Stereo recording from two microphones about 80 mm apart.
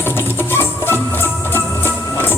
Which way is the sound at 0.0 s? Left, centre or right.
Left.